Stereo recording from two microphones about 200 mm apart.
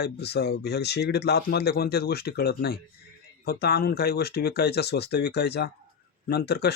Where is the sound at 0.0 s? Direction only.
55° left (ahead or behind).